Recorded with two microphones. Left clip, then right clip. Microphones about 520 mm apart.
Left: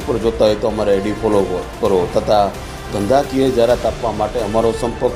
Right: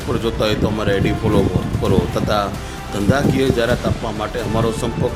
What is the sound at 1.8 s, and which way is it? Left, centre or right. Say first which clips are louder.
Speech: left 4 dB; right.